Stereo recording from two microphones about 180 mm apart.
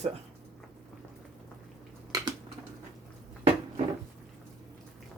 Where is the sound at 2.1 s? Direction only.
20° right (ahead or behind).